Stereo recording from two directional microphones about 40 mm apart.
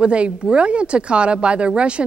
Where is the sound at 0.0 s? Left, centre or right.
Right.